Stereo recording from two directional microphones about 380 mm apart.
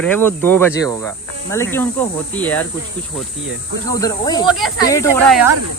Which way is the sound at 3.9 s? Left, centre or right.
Centre.